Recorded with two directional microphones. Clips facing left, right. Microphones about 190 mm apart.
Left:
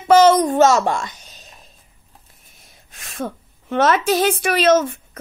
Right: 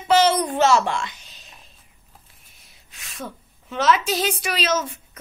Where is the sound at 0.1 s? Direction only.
50° left (ahead or behind).